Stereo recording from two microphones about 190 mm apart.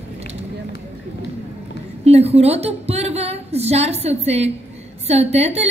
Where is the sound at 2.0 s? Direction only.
30° right (ahead or behind).